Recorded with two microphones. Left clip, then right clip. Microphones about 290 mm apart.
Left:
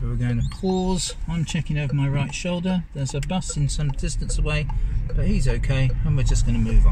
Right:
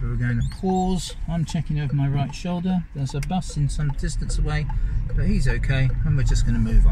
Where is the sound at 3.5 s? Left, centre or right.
Centre.